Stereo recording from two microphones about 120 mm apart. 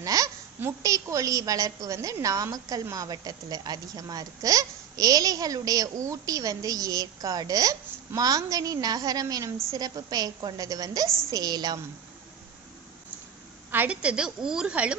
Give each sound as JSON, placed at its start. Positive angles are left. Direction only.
{"t": 0.0, "sound": "babbling", "side_deg": -30}
{"t": 0.6, "sound": "a woman's voice", "side_deg": -25}
{"t": 13.7, "sound": "a woman's voice", "side_deg": -15}